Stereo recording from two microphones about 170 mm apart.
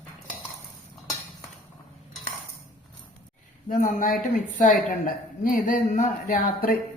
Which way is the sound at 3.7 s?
55° left (ahead or behind).